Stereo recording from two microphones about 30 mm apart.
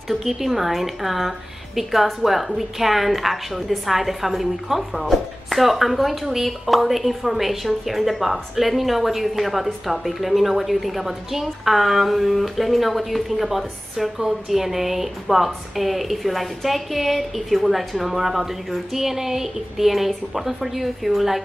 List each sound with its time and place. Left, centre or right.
0.1 s a woman's voice: centre